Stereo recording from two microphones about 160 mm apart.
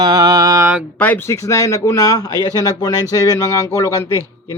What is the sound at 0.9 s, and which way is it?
Speech, 10° left (ahead or behind).